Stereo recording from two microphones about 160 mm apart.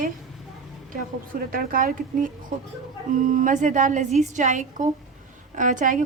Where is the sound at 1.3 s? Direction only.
65° right (ahead or behind).